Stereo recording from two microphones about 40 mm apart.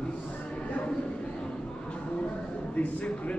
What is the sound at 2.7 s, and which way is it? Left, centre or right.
Speech, left.